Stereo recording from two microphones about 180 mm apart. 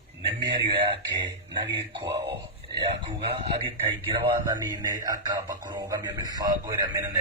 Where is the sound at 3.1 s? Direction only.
35° right (ahead or behind).